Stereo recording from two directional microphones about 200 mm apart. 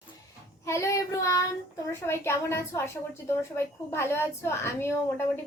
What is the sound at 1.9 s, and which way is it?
A woman's voice, 10° left (ahead or behind).